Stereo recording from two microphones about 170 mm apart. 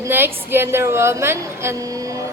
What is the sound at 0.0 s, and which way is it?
A woman's voice, 15° right (ahead or behind).